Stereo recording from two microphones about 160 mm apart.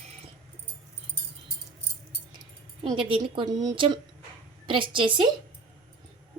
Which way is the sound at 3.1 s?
30° right (ahead or behind).